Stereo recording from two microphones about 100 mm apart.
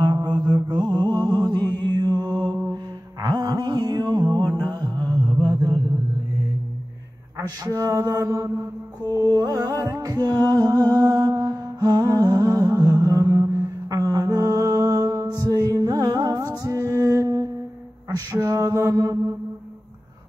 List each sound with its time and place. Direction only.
0.0 s music: 45° right (ahead or behind)
1.6 s mantra: 45° right (ahead or behind)
2.7 s music: 40° right (ahead or behind)
4.7 s mantra: 45° right (ahead or behind)
7.3 s mantra: 35° right (ahead or behind)
9.1 s music: 35° right (ahead or behind)
18.4 s mantra: 35° right (ahead or behind)